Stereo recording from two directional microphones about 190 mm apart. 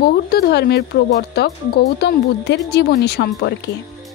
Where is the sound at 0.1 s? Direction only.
55° left (ahead or behind).